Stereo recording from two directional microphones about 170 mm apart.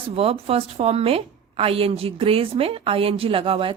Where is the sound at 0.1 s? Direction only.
35° right (ahead or behind).